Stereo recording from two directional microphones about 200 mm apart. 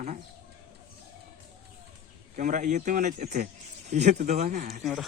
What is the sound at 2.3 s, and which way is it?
Speech, 40° right (ahead or behind).